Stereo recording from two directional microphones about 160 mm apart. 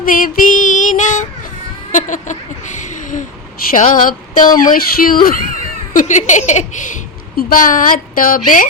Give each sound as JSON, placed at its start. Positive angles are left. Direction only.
{"t": 0.0, "sound": "female singing", "side_deg": 60}
{"t": 1.9, "sound": "a sound", "side_deg": 55}
{"t": 3.8, "sound": "speech", "side_deg": 55}
{"t": 4.4, "sound": "speech", "side_deg": 25}
{"t": 4.6, "sound": "speech", "side_deg": 60}